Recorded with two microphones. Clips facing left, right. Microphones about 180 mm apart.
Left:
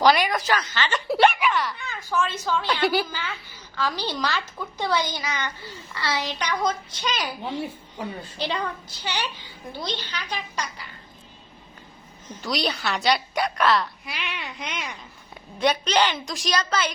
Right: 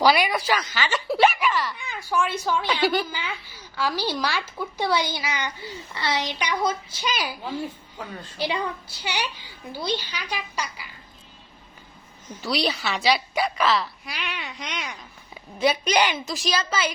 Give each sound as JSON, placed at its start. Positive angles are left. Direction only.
{"t": 0.0, "sound": "speech", "side_deg": -10}
{"t": 1.8, "sound": "a child's voice", "side_deg": -15}
{"t": 2.8, "sound": "a woman's voice", "side_deg": 5}
{"t": 3.1, "sound": "a child's voice", "side_deg": -10}
{"t": 7.6, "sound": "a woman's voice", "side_deg": 10}
{"t": 8.4, "sound": "a child's voice", "side_deg": -10}
{"t": 12.3, "sound": "a woman's voice", "side_deg": -5}